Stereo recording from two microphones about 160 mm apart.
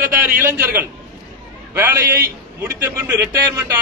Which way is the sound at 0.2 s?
10° right (ahead or behind).